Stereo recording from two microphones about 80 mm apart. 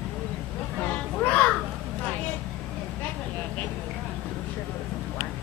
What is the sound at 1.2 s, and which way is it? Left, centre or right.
Music, centre.